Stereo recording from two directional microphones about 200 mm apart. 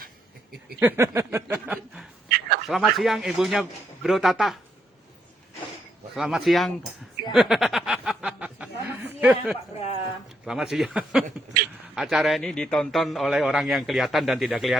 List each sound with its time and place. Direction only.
0.8 s a man's voice: 10° right (ahead or behind)
6.1 s a man's voice: 5° right (ahead or behind)
7.3 s chuckle: centre (ahead or behind)
9.7 s speech: 30° left (ahead or behind)
10.4 s a man's voice: 5° right (ahead or behind)